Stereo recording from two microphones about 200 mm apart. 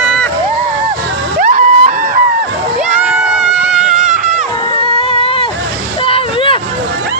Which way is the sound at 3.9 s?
40° right (ahead or behind).